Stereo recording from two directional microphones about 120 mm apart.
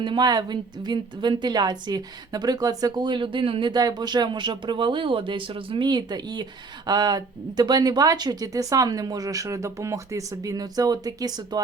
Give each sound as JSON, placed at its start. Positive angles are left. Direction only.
{"t": 0.0, "sound": "a woman's voice", "side_deg": -35}